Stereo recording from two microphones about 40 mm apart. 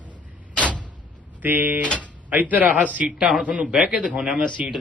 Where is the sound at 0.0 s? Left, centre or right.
Left.